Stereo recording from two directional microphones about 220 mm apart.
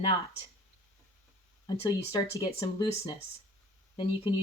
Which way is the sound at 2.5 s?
20° left (ahead or behind).